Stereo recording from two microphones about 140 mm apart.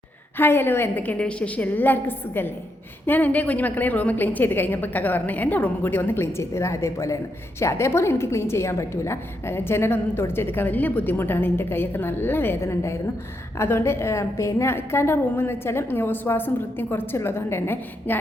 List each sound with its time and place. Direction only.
0.3 s a woman's voice: 15° left (ahead or behind)